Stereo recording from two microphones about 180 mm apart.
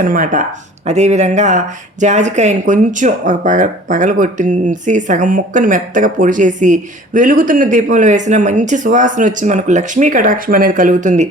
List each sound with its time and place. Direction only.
0.0 s speech: 50° right (ahead or behind)